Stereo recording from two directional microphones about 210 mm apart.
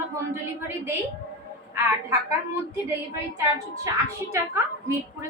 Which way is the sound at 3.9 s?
15° right (ahead or behind).